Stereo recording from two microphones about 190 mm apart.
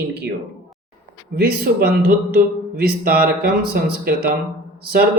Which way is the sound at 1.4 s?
55° right (ahead or behind).